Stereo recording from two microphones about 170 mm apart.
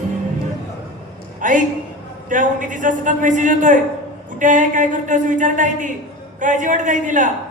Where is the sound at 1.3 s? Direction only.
50° right (ahead or behind).